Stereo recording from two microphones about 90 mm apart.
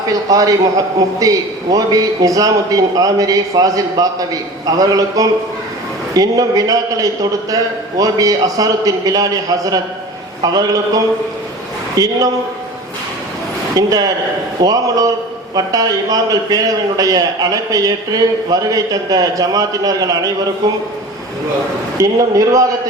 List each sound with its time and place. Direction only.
0.1 s a man's voice: 40° right (ahead or behind)
13.7 s a man's voice: 45° right (ahead or behind)
21.9 s a man's voice: 40° right (ahead or behind)